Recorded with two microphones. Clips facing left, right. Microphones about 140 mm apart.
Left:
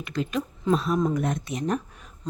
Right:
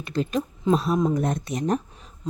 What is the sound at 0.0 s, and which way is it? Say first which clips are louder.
Speech: right 3 dB; 35° right (ahead or behind).